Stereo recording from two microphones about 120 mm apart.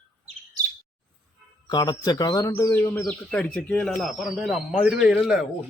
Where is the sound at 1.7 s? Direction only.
35° left (ahead or behind).